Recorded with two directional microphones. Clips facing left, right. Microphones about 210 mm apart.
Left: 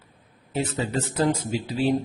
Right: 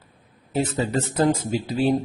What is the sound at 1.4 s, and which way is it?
Speech, 45° right (ahead or behind).